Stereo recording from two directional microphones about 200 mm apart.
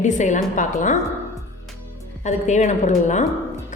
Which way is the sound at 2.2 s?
35° left (ahead or behind).